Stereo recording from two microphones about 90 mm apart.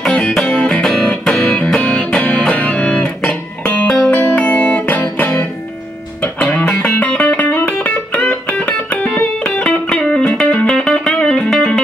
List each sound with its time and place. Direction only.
0.0 s music: 5° left (ahead or behind)
0.5 s music: 15° left (ahead or behind)
0.8 s music: 5° left (ahead or behind)